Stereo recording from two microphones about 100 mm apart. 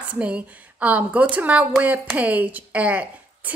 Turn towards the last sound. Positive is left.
turn(degrees=-15)  # may be behind; listen again after turning